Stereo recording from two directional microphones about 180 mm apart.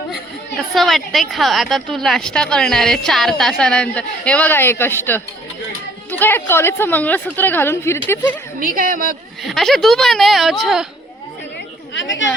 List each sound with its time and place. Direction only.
0.7 s a woman's voice: centre (ahead or behind)
8.5 s a woman's voice: 50° right (ahead or behind)
9.5 s a woman's voice: centre (ahead or behind)
11.9 s speech: 90° left